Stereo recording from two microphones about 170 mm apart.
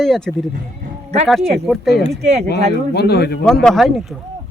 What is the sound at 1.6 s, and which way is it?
Speech, centre (ahead or behind).